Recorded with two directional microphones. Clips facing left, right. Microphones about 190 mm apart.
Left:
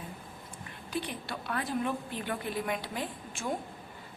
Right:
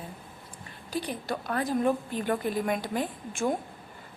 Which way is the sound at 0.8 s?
40° right (ahead or behind).